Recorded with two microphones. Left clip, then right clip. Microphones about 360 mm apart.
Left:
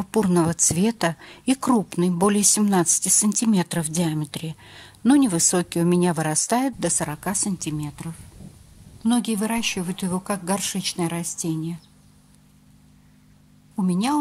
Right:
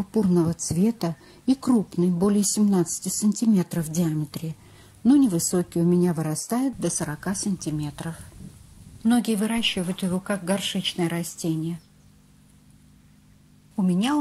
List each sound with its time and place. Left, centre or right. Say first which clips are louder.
0.1 s a woman's voice: left 3 dB; left
5.0 s a woman's voice: left 1 dB; left
5.4 s speech: left 4 dB; centre
5.7 s a woman's voice: left 2 dB; left; by 11.8 s centre
13.9 s speech: left 2 dB; centre